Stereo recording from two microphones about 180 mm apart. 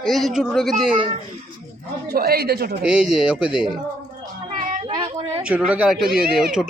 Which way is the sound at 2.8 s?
5° right (ahead or behind).